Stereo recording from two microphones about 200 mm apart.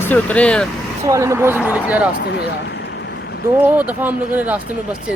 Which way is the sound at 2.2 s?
55° left (ahead or behind).